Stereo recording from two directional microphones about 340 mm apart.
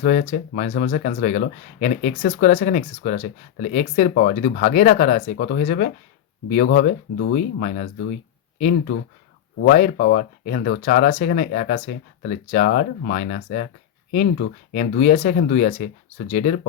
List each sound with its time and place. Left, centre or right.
0.0 s speech: left
9.6 s speech: left